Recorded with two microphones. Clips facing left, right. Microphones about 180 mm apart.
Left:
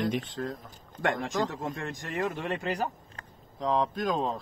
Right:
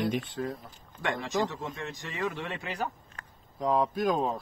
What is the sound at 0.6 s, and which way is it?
Speech, 50° left (ahead or behind).